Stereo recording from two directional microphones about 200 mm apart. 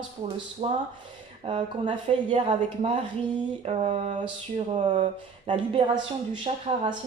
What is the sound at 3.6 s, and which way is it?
Speech, 35° right (ahead or behind).